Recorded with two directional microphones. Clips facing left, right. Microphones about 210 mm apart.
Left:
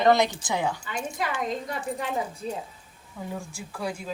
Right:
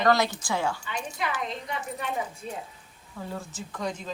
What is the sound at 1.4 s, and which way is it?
A woman's voice, 45° left (ahead or behind).